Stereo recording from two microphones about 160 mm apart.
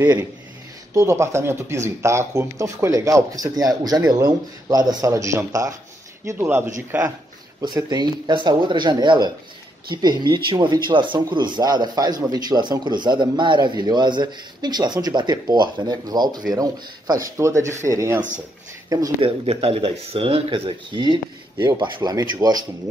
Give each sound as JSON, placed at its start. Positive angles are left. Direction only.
{"t": 0.9, "sound": "speech", "side_deg": -15}
{"t": 7.6, "sound": "speech", "side_deg": -25}
{"t": 19.2, "sound": "speech", "side_deg": -35}